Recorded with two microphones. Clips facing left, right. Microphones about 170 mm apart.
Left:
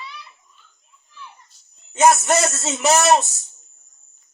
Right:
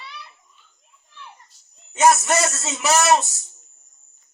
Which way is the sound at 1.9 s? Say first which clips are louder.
Left 1 dB; 30° left (ahead or behind).